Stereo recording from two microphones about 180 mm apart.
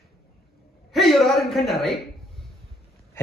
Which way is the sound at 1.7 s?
Centre (ahead or behind).